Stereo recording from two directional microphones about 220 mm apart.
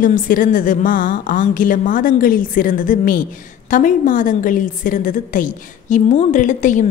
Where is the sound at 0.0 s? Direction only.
35° left (ahead or behind).